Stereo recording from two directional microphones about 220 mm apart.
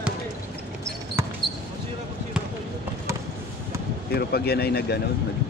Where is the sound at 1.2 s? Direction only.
10° right (ahead or behind).